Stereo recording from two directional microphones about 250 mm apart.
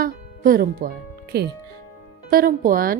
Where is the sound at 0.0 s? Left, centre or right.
Right.